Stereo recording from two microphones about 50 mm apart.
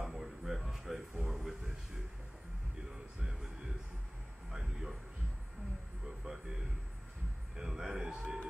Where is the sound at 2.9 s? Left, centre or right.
Centre.